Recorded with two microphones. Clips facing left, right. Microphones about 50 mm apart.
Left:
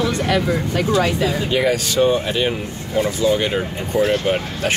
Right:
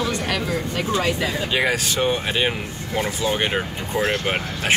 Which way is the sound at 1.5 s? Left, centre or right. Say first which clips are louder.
Left 3 dB; right.